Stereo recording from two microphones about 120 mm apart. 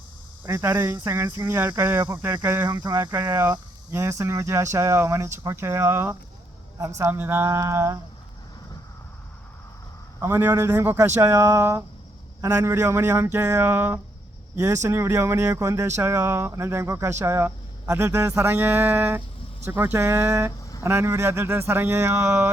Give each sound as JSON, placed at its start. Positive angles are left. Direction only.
{"t": 0.4, "sound": "speech", "side_deg": -25}
{"t": 2.6, "sound": "speech", "side_deg": -30}
{"t": 3.1, "sound": "speech", "side_deg": -20}
{"t": 10.2, "sound": "speech", "side_deg": -20}